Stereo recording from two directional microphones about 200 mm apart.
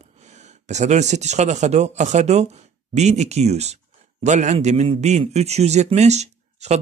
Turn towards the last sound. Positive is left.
turn(degrees=-35)  # may be behind; listen again after turning